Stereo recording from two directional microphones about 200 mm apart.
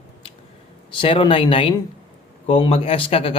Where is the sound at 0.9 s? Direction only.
25° left (ahead or behind).